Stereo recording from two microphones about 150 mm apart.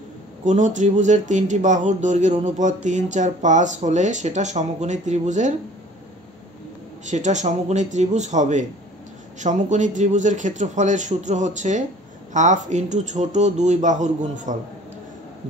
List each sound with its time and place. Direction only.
0.5 s speech: 55° right (ahead or behind)
7.1 s a man's voice: 50° right (ahead or behind)